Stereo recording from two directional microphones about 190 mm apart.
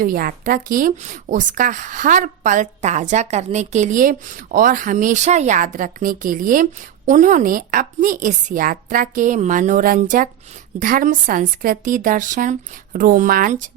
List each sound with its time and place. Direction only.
0.0 s a woman's voice: 50° right (ahead or behind)